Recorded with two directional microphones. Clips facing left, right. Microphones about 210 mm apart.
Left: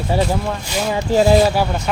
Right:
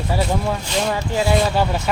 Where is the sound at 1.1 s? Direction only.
40° left (ahead or behind).